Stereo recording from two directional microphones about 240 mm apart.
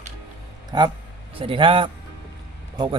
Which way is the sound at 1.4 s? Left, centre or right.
Right.